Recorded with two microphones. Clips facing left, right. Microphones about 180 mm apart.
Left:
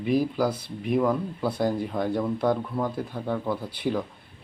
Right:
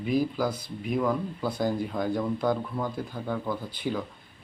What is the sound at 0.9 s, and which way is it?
Speech, 5° left (ahead or behind).